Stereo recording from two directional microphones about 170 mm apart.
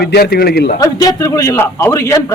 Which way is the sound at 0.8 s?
20° left (ahead or behind).